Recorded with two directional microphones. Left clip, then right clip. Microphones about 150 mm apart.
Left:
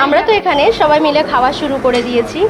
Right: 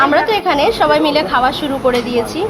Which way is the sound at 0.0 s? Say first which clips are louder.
Left 1 dB; 25° left (ahead or behind).